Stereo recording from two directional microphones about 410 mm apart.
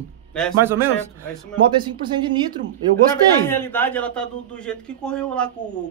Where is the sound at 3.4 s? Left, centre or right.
Centre.